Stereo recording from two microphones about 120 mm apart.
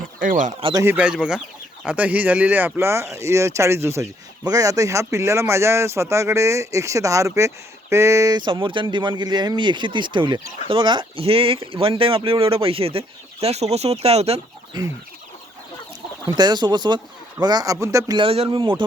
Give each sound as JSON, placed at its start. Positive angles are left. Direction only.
{"t": 0.6, "sound": "speech", "side_deg": -35}
{"t": 0.9, "sound": "speech", "side_deg": -10}
{"t": 16.2, "sound": "speech", "side_deg": -35}
{"t": 18.2, "sound": "speech", "side_deg": -45}